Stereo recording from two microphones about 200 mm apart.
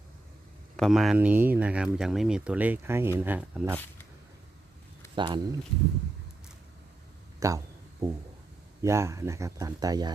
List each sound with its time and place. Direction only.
0.8 s speech: centre (ahead or behind)
5.1 s speech: 25° right (ahead or behind)
7.3 s speech: 15° right (ahead or behind)
8.8 s speech: 15° right (ahead or behind)